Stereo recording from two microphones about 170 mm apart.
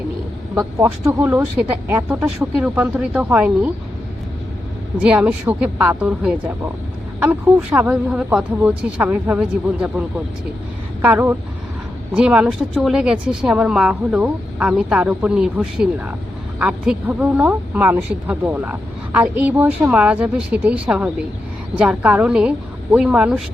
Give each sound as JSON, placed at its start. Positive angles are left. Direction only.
{"t": 0.8, "sound": "speech", "side_deg": -15}
{"t": 4.9, "sound": "speech", "side_deg": -5}
{"t": 11.0, "sound": "speech", "side_deg": -10}